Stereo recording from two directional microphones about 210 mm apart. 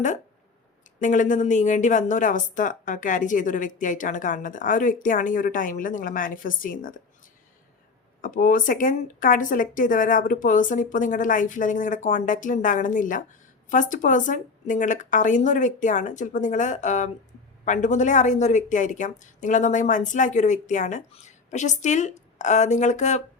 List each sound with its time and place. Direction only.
0.9 s a woman's voice: 35° left (ahead or behind)
8.2 s a woman's voice: 40° left (ahead or behind)